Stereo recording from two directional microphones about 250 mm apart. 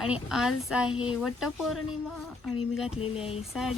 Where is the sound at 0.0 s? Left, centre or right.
Centre.